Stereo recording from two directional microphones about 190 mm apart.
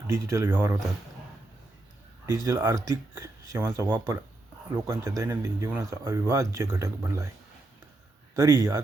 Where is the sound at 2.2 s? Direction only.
15° right (ahead or behind).